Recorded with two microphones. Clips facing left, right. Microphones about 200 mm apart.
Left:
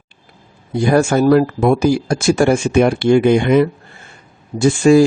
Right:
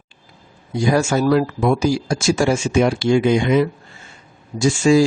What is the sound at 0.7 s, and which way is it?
Speech, 55° left (ahead or behind).